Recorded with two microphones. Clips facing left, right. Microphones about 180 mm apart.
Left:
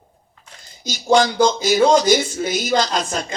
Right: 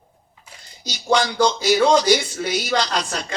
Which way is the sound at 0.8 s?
45° left (ahead or behind).